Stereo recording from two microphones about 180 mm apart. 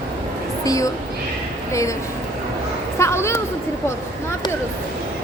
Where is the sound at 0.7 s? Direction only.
20° left (ahead or behind).